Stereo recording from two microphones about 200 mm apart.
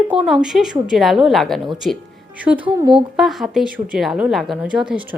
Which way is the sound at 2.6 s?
25° right (ahead or behind).